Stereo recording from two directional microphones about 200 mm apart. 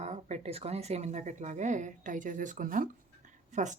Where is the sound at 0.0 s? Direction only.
35° right (ahead or behind).